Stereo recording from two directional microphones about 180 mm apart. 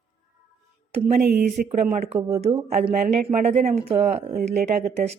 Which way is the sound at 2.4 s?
35° right (ahead or behind).